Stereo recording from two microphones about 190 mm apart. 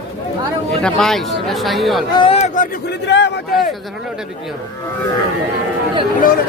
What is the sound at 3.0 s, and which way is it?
Speech, 65° left (ahead or behind).